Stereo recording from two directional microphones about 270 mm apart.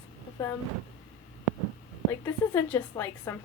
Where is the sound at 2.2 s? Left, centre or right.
Centre.